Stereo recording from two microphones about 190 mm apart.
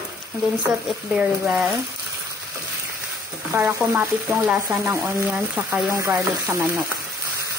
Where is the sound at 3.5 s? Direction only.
15° right (ahead or behind).